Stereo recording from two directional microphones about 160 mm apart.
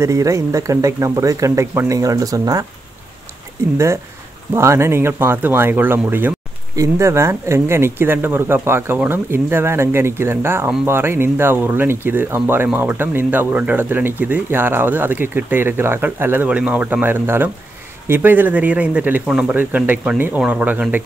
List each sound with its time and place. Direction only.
0.0 s speech: 20° right (ahead or behind)
3.7 s speech: 15° right (ahead or behind)